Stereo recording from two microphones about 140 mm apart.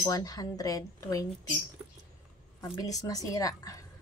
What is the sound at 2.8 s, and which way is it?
Speech, 25° left (ahead or behind).